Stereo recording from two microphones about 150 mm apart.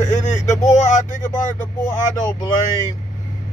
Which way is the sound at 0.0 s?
55° left (ahead or behind).